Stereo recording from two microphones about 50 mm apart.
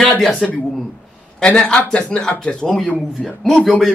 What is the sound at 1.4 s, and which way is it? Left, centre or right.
A man's voice, centre.